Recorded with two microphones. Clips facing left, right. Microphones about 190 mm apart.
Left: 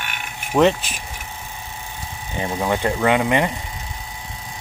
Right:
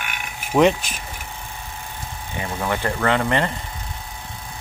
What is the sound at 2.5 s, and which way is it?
Speech, 15° left (ahead or behind).